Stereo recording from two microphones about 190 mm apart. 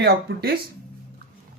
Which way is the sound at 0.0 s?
55° right (ahead or behind).